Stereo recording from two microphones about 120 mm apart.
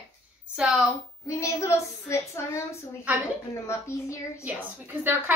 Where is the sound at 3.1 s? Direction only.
10° right (ahead or behind).